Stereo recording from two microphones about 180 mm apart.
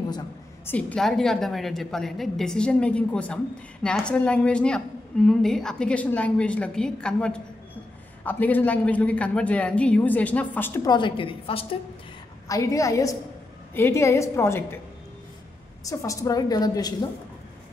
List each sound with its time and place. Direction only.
0.7 s a woman's voice: 5° left (ahead or behind); by 11.6 s 30° left (ahead or behind)
12.4 s a man's voice: 20° left (ahead or behind)
15.8 s a woman's voice: 15° left (ahead or behind)